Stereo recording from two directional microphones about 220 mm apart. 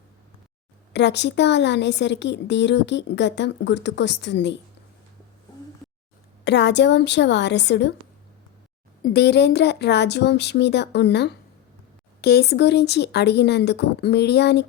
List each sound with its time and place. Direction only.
0.9 s a woman's voice: 50° left (ahead or behind)
6.4 s a woman's voice: 50° left (ahead or behind)
9.0 s a woman's voice: 45° left (ahead or behind)